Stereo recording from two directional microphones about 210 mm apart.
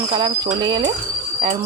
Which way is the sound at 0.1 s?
20° right (ahead or behind).